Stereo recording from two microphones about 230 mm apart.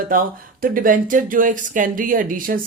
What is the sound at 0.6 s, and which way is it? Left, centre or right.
Speech, right.